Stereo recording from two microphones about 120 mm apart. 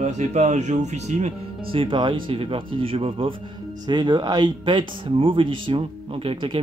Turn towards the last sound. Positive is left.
turn(degrees=-45)  # may be behind; listen again after turning